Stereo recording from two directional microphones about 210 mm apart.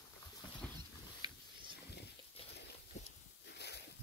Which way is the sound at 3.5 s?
50° left (ahead or behind).